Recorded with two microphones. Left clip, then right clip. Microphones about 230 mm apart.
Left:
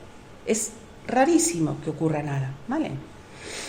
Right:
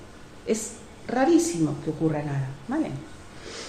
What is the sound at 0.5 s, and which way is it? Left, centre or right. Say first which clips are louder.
A woman's voice: left 1 dB; left.